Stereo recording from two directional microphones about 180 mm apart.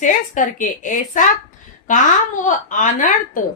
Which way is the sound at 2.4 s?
45° left (ahead or behind).